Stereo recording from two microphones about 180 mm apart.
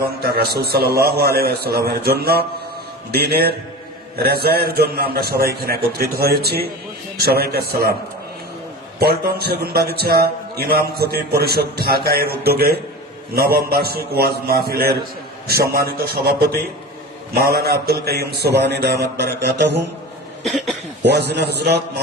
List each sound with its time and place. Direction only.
0.0 s a man's voice: 60° right (ahead or behind)
9.0 s a man's voice: 60° right (ahead or behind)
20.4 s cough: centre (ahead or behind)
21.0 s a man's voice: 65° right (ahead or behind)